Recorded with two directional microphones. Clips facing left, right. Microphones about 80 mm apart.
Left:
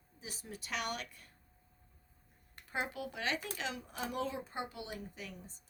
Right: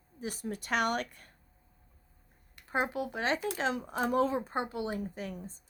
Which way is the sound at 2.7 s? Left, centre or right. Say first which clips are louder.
Right 7 dB; right.